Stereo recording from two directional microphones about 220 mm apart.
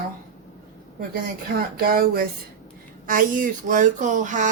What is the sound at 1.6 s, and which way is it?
Speech, 40° right (ahead or behind).